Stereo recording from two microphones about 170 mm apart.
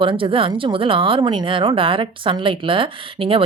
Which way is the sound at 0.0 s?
30° right (ahead or behind).